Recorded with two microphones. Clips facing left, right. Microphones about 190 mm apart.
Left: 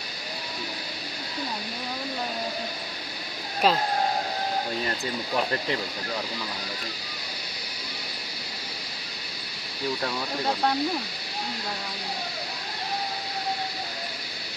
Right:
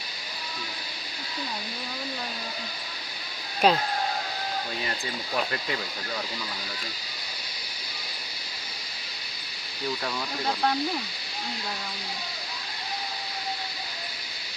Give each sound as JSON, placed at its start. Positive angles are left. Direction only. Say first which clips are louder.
{"t": 3.6, "sound": "speech", "louder": "right 1 dB", "side_deg": 0}